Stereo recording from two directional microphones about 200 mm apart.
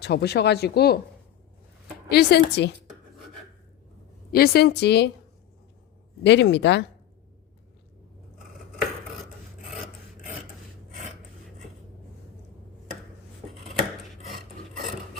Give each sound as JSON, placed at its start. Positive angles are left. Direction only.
{"t": 0.0, "sound": "speech", "side_deg": 55}
{"t": 2.0, "sound": "a woman's voice", "side_deg": 55}
{"t": 4.3, "sound": "speech", "side_deg": 50}
{"t": 6.2, "sound": "speech", "side_deg": 60}